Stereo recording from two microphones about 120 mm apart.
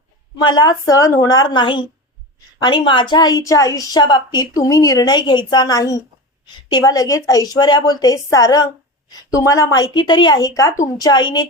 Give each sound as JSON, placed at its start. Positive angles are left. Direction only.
{"t": 0.4, "sound": "a woman's voice", "side_deg": 35}